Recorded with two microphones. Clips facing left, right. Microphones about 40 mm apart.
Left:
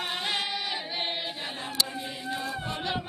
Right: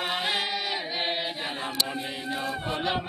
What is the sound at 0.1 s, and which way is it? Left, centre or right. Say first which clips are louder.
Chant: right 2 dB; centre.